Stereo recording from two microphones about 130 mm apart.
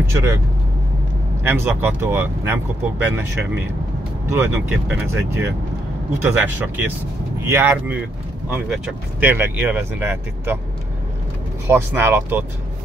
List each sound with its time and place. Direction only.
0.1 s speech: 25° right (ahead or behind)
1.4 s speech: 15° right (ahead or behind)
4.4 s speech: 15° right (ahead or behind)
9.2 s speech: 15° right (ahead or behind)
11.6 s speech: 20° right (ahead or behind)